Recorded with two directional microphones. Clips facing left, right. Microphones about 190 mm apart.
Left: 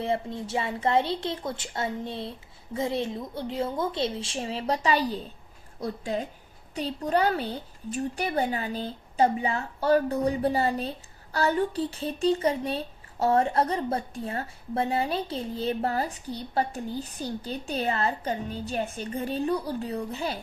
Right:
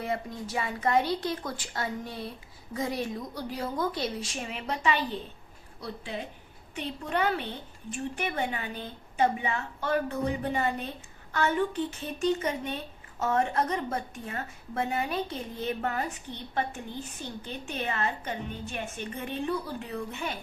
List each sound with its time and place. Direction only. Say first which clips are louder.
0.0 s a woman's voice: left 4 dB; 25° left (ahead or behind)